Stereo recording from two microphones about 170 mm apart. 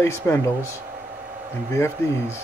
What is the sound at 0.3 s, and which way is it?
Speech, 15° left (ahead or behind).